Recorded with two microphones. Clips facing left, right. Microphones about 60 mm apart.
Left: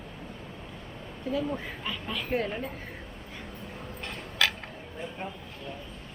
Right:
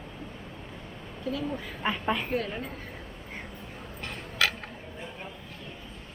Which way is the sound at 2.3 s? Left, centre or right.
Left.